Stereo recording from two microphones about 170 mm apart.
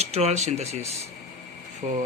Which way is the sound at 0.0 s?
40° right (ahead or behind).